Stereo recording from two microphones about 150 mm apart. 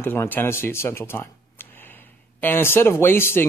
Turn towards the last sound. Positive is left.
turn(degrees=15)  # may be behind; listen again after turning